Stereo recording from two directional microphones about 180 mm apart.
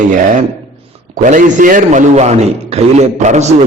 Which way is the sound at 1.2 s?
45° right (ahead or behind).